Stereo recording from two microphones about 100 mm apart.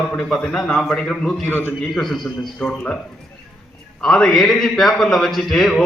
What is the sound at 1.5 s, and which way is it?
Speech, 20° left (ahead or behind).